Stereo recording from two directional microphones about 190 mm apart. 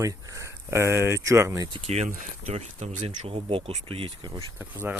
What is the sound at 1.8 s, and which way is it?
Speech, 35° right (ahead or behind).